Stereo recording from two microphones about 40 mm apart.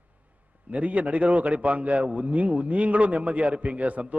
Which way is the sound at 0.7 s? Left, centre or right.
Right.